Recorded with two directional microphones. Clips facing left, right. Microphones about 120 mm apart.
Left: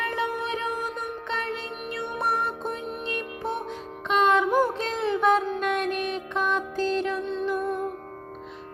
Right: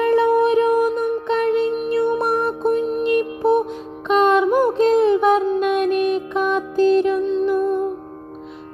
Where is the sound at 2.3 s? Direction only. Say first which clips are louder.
Right 11 dB; 35° right (ahead or behind).